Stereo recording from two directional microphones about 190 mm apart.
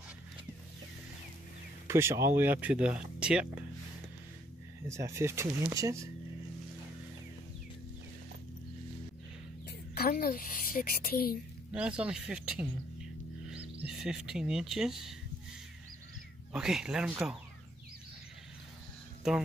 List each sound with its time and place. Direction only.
1.9 s speech: 15° right (ahead or behind)
4.8 s speech: 15° right (ahead or behind)
9.7 s a woman's voice: 55° left (ahead or behind)
11.7 s speech: 5° right (ahead or behind)
16.5 s speech: 5° right (ahead or behind)
19.2 s speech: centre (ahead or behind)